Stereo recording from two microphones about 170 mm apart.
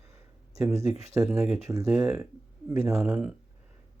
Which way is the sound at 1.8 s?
5° right (ahead or behind).